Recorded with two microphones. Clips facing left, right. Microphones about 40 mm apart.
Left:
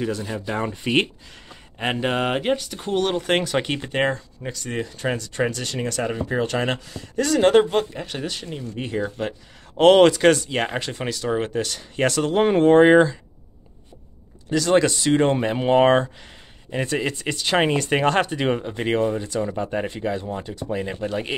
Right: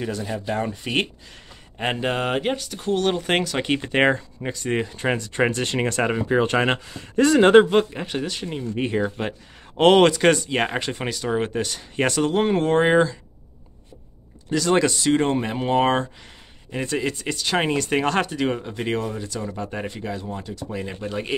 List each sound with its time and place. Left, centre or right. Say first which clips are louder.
0.0 s speech: left 1 dB; centre
3.9 s speech: right 3 dB; right
8.1 s speech: right 2 dB; centre
8.5 s speech: right 4 dB; centre
9.8 s speech: left 2 dB; centre
14.5 s speech: left 1 dB; centre